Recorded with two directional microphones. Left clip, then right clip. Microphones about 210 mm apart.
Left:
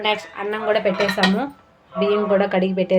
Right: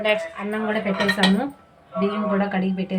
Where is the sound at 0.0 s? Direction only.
40° left (ahead or behind).